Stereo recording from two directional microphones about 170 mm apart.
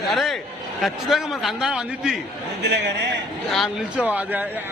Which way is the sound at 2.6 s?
90° right.